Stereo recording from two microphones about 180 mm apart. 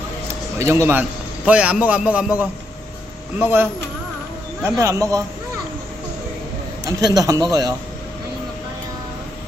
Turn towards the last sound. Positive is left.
turn(degrees=-20)  # may be behind; listen again after turning